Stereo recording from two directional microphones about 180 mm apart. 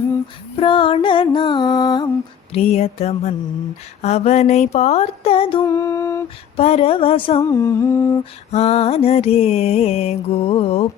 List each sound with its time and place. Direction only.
0.5 s music: 30° left (ahead or behind)
2.5 s mantra: 35° left (ahead or behind)
5.6 s a sound: 20° left (ahead or behind)
6.6 s mantra: 35° left (ahead or behind)
7.5 s humming: 15° left (ahead or behind)
8.5 s mantra: 35° left (ahead or behind)